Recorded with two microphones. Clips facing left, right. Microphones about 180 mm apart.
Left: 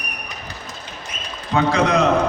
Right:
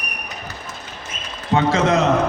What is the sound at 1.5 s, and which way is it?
Speech, 25° right (ahead or behind).